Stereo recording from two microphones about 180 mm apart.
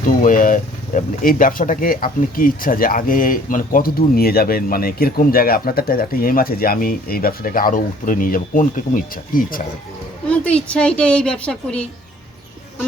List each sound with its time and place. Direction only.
0.0 s speech: 50° left (ahead or behind)
10.2 s a woman's voice: 5° left (ahead or behind)